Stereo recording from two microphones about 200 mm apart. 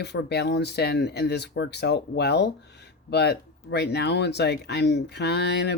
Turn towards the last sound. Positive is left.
turn(degrees=55)  # may be behind; listen again after turning